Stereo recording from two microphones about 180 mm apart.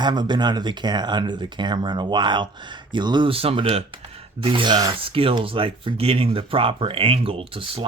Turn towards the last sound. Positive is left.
turn(degrees=-30)  # may be behind; listen again after turning